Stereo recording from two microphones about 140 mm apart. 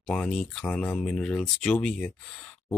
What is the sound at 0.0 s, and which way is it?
Speech, 5° left (ahead or behind).